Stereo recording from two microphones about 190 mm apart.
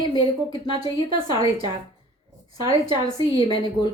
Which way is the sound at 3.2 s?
25° left (ahead or behind).